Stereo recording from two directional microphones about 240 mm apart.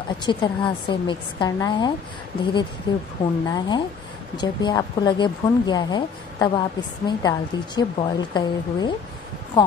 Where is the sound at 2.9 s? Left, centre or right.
Centre.